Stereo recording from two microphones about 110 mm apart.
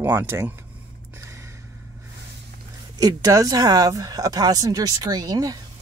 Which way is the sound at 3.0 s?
35° right (ahead or behind).